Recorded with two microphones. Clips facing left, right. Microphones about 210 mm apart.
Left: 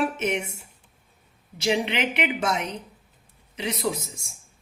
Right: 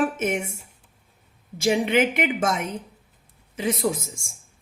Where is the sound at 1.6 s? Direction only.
50° right (ahead or behind).